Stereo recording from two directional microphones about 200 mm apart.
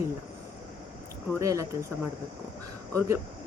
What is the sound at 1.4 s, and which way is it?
Speech, 15° right (ahead or behind).